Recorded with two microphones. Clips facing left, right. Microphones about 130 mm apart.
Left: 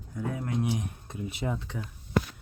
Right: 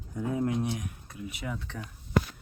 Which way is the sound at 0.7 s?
25° left (ahead or behind).